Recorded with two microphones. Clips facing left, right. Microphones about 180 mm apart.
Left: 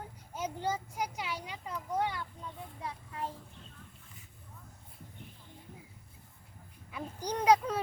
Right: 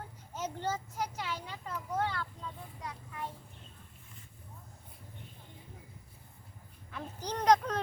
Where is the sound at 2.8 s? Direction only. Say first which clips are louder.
Left 4 dB; 30° left (ahead or behind).